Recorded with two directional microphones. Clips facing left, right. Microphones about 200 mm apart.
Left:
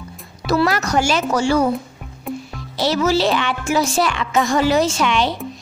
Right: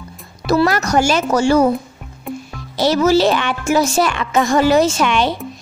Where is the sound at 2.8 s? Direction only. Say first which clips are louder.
Right 4 dB; 45° right (ahead or behind).